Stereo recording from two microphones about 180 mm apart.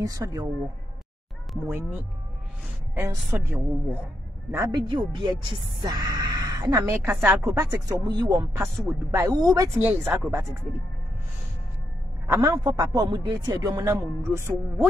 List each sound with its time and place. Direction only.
0.0 s speech: 20° right (ahead or behind)
1.7 s speech: 10° right (ahead or behind)
4.8 s speech: 25° right (ahead or behind)
12.3 s speech: 20° right (ahead or behind)